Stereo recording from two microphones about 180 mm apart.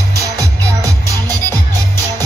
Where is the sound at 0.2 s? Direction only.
20° right (ahead or behind).